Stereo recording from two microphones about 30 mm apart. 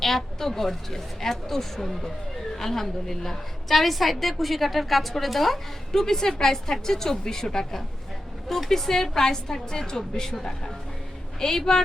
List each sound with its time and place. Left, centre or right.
0.0 s a woman's voice: centre
5.9 s speech: centre
11.3 s speech: centre